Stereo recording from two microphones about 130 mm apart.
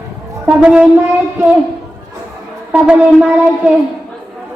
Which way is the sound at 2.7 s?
10° right (ahead or behind).